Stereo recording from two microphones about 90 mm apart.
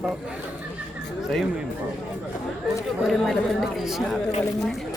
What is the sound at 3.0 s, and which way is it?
A woman's voice, 5° left (ahead or behind).